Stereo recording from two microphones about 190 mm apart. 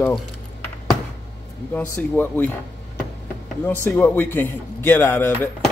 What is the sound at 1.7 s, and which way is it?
Speech, 10° left (ahead or behind).